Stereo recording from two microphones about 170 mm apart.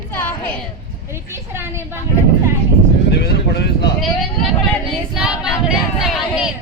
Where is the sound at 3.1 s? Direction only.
70° left (ahead or behind).